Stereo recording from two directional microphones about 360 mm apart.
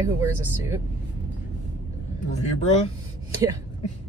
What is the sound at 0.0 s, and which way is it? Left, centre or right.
Speech, centre.